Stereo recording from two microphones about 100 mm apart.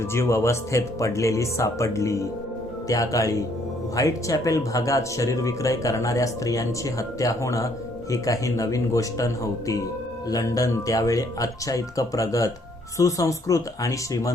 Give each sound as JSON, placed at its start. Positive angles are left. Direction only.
{"t": 0.0, "sound": "speech", "side_deg": 25}